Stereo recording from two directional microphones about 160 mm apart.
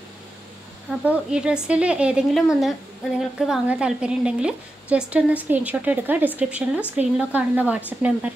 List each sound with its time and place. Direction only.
0.8 s a woman's voice: 5° right (ahead or behind)